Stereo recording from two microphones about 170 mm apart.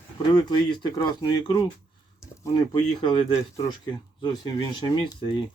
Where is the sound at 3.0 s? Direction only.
30° left (ahead or behind).